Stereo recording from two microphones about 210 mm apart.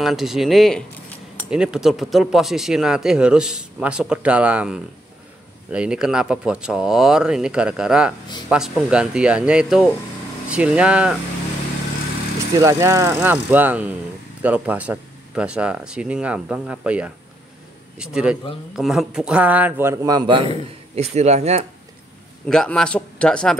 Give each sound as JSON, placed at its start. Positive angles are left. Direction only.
{"t": 0.0, "sound": "speech", "side_deg": 0}
{"t": 12.5, "sound": "a man's voice", "side_deg": -15}
{"t": 20.9, "sound": "a man's voice", "side_deg": -30}
{"t": 22.5, "sound": "speech", "side_deg": 5}